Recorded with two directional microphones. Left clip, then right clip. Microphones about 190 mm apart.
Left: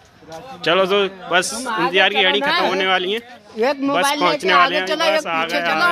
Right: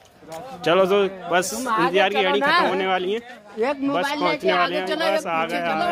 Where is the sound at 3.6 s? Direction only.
45° left (ahead or behind).